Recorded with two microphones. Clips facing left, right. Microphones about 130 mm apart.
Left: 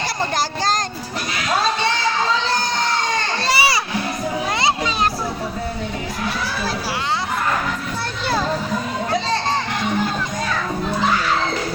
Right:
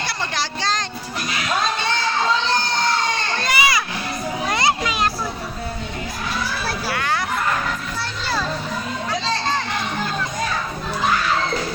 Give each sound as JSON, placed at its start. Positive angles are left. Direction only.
{"t": 0.3, "sound": "speech", "side_deg": 45}
{"t": 3.4, "sound": "children playing", "side_deg": 35}